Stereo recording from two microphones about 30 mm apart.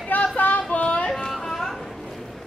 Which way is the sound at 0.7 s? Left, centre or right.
Left.